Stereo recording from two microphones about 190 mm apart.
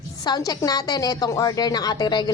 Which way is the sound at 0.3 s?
20° left (ahead or behind).